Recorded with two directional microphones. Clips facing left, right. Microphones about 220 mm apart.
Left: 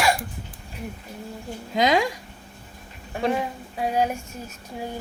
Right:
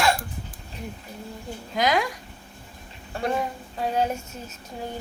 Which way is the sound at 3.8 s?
10° left (ahead or behind).